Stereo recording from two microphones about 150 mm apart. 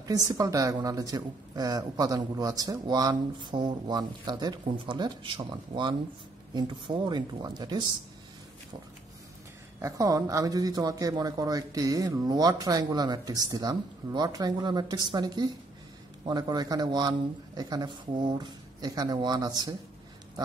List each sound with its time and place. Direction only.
0.0 s speech: 25° right (ahead or behind)
9.8 s speech: 20° right (ahead or behind)